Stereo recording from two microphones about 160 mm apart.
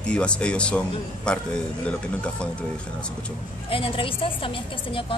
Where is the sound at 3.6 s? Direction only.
35° left (ahead or behind).